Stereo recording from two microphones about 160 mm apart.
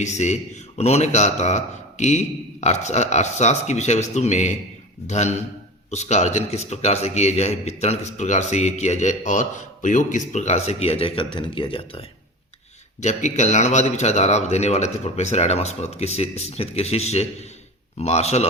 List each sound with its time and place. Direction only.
0.0 s a man's voice: 45° left (ahead or behind)
13.0 s a man's voice: 45° left (ahead or behind)